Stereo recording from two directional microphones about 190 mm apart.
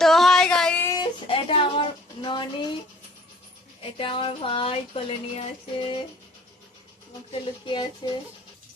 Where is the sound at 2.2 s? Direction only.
25° left (ahead or behind).